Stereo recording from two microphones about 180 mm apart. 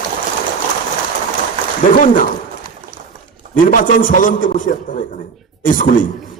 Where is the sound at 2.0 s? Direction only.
50° left (ahead or behind).